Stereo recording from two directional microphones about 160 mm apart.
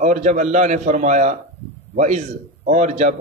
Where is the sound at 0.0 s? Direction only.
50° right (ahead or behind).